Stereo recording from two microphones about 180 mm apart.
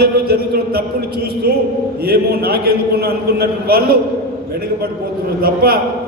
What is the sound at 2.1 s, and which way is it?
A man's voice, 60° right (ahead or behind).